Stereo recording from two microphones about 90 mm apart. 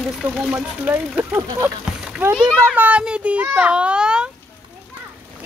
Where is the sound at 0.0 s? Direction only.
5° right (ahead or behind).